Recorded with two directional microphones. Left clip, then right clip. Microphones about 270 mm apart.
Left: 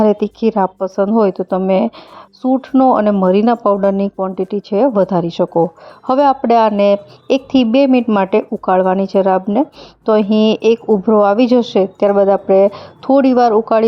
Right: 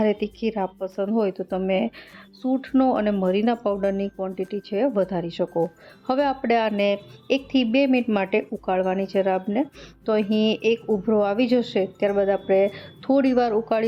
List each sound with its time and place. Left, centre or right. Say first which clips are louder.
0.0 s speech: left 10 dB; left